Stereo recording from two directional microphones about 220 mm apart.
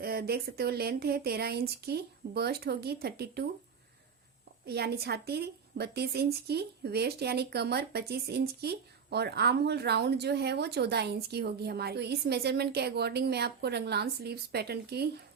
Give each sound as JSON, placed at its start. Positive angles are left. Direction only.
{"t": 0.0, "sound": "speech", "side_deg": -45}
{"t": 4.6, "sound": "speech", "side_deg": -45}